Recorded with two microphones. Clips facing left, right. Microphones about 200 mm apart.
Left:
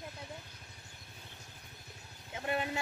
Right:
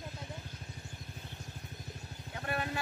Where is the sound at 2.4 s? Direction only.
20° left (ahead or behind).